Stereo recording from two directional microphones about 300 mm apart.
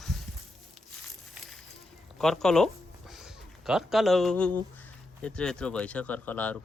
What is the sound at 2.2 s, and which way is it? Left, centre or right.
Speech, centre.